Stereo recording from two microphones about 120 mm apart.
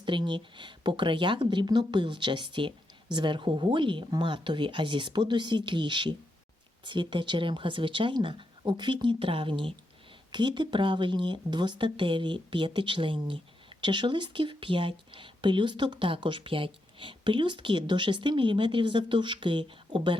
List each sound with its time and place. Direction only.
0.0 s speech: 40° right (ahead or behind)